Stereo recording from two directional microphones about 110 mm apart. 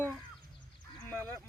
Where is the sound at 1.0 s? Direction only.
15° left (ahead or behind).